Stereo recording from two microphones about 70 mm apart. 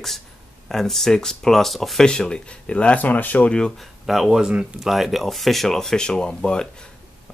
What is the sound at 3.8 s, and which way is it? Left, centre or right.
Speech, centre.